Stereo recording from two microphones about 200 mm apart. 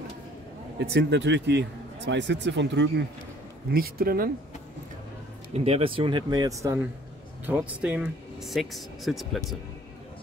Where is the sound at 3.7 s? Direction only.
50° right (ahead or behind).